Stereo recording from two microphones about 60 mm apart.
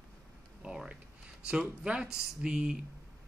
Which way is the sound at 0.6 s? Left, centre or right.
Centre.